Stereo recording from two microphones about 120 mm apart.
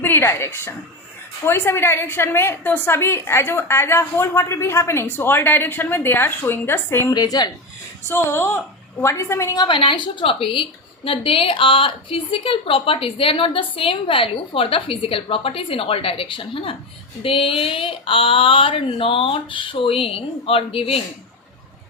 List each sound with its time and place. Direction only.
0.0 s a woman's voice: 20° left (ahead or behind)
7.1 s a woman's voice: 35° left (ahead or behind)
8.0 s a woman's voice: 20° left (ahead or behind)
9.6 s a woman's voice: 45° left (ahead or behind)